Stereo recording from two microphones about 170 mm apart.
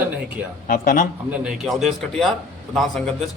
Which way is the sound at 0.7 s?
55° left (ahead or behind).